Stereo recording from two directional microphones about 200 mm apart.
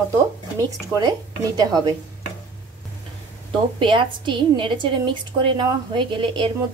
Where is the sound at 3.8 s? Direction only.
25° right (ahead or behind).